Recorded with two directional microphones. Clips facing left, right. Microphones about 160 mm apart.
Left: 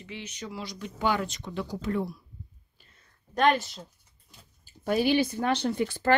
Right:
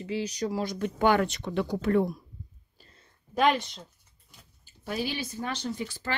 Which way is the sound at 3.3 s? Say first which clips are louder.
Left 1 dB; centre (ahead or behind).